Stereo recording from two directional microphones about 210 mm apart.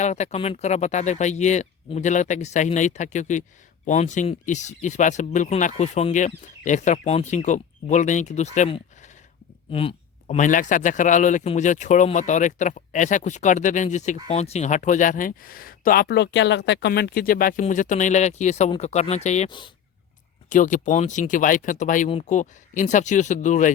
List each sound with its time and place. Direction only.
0.0 s speech: 35° left (ahead or behind)
20.5 s speech: 35° left (ahead or behind)